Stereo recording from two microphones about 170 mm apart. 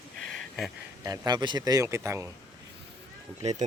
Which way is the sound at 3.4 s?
40° right (ahead or behind).